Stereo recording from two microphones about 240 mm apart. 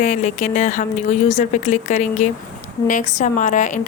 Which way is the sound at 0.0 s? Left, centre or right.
Left.